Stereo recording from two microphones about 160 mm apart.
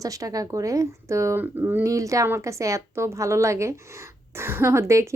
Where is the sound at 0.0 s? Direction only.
20° right (ahead or behind).